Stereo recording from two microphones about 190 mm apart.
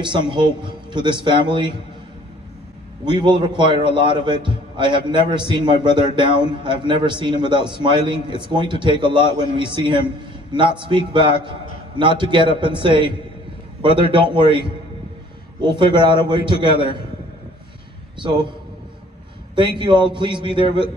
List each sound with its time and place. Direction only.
0.0 s a man's voice: 25° right (ahead or behind)
3.1 s a man's voice: 25° right (ahead or behind)
18.2 s a man's voice: 25° right (ahead or behind)
19.8 s a man's voice: 25° right (ahead or behind)